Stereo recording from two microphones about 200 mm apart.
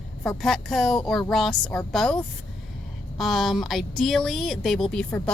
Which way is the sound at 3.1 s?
Centre (ahead or behind).